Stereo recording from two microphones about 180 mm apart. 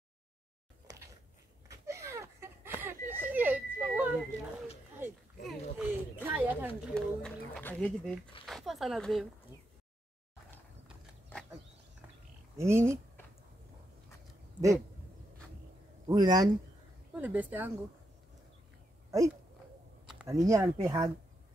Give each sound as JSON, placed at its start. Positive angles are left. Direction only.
{"t": 1.7, "sound": "a sound", "side_deg": -15}
{"t": 4.3, "sound": "speech", "side_deg": 40}
{"t": 5.5, "sound": "a sound", "side_deg": -5}
{"t": 6.8, "sound": "a sound", "side_deg": 5}
{"t": 8.5, "sound": "speech", "side_deg": 0}
{"t": 12.5, "sound": "speech", "side_deg": -15}
{"t": 16.1, "sound": "speech", "side_deg": -20}
{"t": 17.1, "sound": "speech", "side_deg": -10}
{"t": 19.0, "sound": "speech", "side_deg": -15}